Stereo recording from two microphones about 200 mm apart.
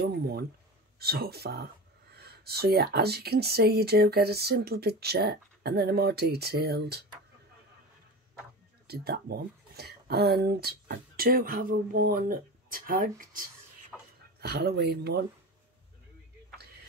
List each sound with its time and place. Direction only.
0.9 s speech: 50° right (ahead or behind)
8.8 s speech: 50° right (ahead or behind)
13.9 s a sound: 5° right (ahead or behind)
14.4 s speech: 50° right (ahead or behind)